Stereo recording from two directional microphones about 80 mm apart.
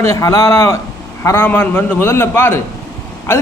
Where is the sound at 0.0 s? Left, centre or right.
Left.